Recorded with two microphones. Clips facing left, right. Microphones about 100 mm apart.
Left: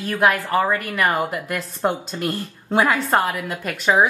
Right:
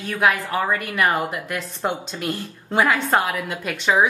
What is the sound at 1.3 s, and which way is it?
Speech, 45° left (ahead or behind).